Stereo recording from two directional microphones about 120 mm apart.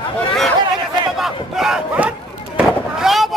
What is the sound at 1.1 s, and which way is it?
Fireworks, 5° right (ahead or behind).